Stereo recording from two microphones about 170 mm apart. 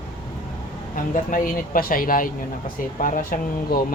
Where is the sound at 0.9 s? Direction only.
50° left (ahead or behind).